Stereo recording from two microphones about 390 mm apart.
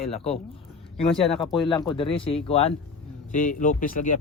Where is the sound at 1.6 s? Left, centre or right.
Centre.